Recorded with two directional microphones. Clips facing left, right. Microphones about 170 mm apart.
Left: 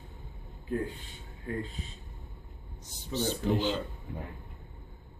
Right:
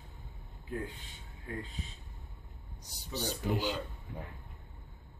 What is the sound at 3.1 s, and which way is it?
Speech, 10° right (ahead or behind).